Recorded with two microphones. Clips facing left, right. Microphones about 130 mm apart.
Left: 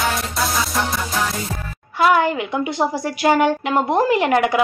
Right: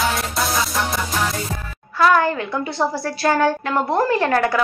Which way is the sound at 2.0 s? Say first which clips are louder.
Even; 15° left (ahead or behind).